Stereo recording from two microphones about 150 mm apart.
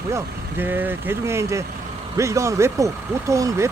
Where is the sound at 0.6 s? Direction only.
15° right (ahead or behind).